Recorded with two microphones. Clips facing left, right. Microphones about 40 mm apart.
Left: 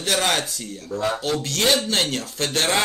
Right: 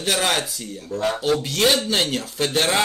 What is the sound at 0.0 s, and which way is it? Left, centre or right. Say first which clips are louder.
Speech: even; centre.